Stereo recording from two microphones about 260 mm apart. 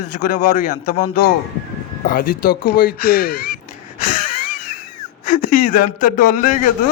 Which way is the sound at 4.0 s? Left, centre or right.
Left.